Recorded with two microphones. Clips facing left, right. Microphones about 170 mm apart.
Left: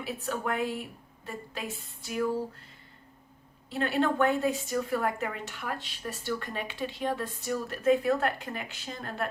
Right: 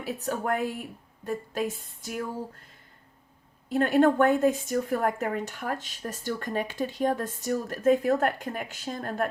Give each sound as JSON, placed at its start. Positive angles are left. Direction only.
{"t": 0.0, "sound": "a woman's voice", "side_deg": -40}
{"t": 3.7, "sound": "a woman's voice", "side_deg": -45}